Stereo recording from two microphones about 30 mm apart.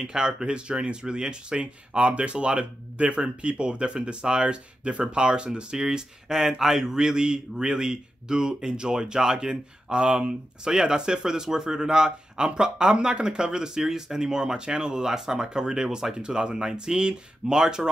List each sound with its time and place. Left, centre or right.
0.0 s speech: right